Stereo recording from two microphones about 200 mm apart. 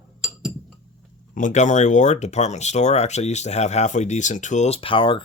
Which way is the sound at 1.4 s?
40° left (ahead or behind).